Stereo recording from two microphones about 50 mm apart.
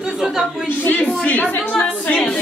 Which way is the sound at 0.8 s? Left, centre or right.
Left.